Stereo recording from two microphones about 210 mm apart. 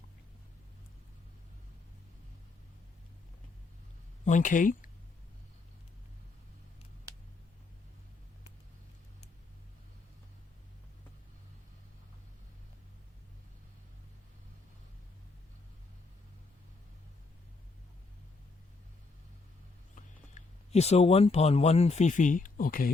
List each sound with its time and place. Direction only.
4.3 s speech: 40° left (ahead or behind)
20.0 s speech: 35° left (ahead or behind)